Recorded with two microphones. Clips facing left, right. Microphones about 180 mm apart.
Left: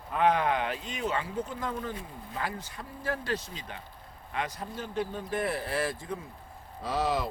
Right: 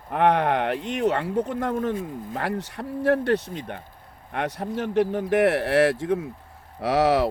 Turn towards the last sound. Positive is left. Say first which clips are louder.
# right 9 dB
turn(degrees=-75)  # may be behind; listen again after turning